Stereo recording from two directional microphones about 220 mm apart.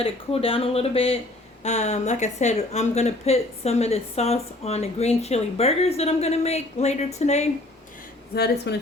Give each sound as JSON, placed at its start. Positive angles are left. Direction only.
{"t": 0.0, "sound": "speech", "side_deg": 25}
{"t": 8.7, "sound": "a woman's voice", "side_deg": 50}